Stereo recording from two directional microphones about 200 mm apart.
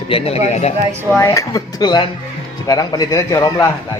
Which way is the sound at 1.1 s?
15° left (ahead or behind).